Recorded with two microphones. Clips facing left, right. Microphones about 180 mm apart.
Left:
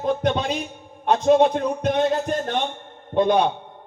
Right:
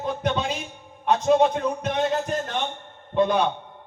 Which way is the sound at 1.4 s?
35° left (ahead or behind).